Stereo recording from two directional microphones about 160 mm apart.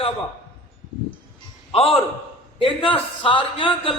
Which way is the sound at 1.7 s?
35° left (ahead or behind).